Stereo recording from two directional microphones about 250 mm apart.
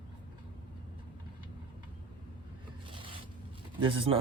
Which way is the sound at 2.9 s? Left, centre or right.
Centre.